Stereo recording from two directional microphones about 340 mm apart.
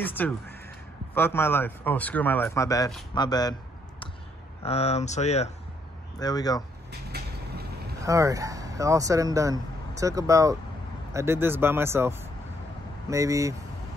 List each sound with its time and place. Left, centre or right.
0.0 s speech: centre
4.6 s speech: centre
6.9 s vehicle: right
8.0 s speech: centre